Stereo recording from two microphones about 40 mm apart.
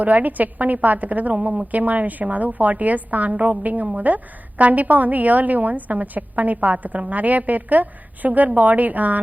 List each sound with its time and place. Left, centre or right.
0.0 s a woman's voice: right